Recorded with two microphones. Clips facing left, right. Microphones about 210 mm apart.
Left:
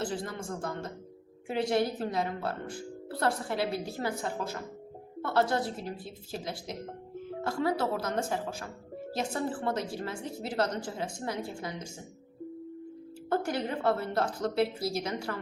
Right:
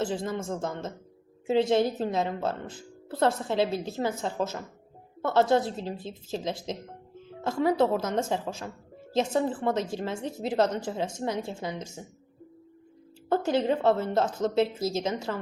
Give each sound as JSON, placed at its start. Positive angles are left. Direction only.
{"t": 0.0, "sound": "a woman's voice", "side_deg": -20}
{"t": 13.3, "sound": "a woman's voice", "side_deg": -20}